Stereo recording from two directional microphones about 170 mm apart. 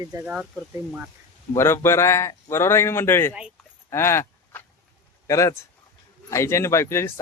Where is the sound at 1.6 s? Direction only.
15° left (ahead or behind).